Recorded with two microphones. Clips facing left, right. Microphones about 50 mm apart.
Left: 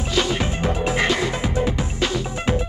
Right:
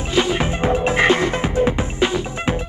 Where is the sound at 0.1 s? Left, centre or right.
Right.